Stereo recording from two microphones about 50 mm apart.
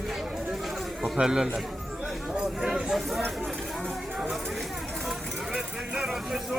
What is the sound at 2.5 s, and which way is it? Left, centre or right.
Speech, centre.